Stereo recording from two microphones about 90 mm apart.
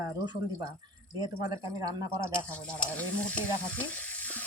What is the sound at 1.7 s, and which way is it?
Speech, 45° right (ahead or behind).